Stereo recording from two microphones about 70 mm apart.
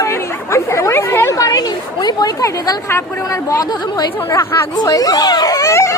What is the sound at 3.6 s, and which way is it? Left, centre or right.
A woman's voice, left.